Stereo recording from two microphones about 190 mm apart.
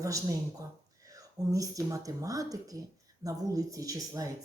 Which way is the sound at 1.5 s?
20° right (ahead or behind).